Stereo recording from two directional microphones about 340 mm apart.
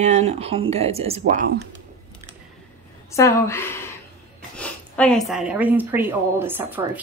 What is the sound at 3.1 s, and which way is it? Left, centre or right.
A woman's voice, centre.